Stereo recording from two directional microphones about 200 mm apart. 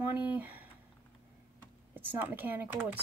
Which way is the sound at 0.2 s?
10° right (ahead or behind).